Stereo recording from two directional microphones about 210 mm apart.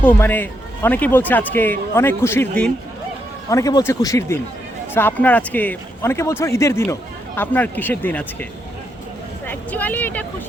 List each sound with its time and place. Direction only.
0.0 s a man's voice: 10° left (ahead or behind)
3.5 s a man's voice: 15° left (ahead or behind)
9.5 s a man's voice: 10° left (ahead or behind)